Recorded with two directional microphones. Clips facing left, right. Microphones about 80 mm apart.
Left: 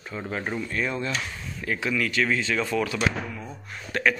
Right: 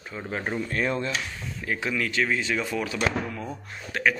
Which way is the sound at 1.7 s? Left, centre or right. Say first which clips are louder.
Left 1 dB; right.